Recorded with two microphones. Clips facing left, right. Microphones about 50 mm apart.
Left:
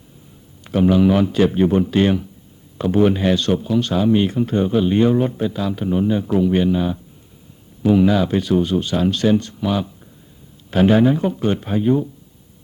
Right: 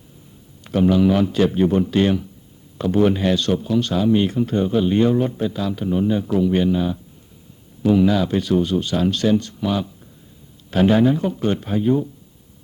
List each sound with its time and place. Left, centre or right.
0.6 s a man's voice: centre
3.8 s a man's voice: left
9.6 s a man's voice: centre